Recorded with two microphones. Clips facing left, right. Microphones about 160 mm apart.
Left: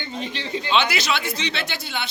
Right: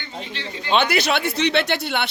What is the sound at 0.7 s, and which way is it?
Speech, 55° right (ahead or behind).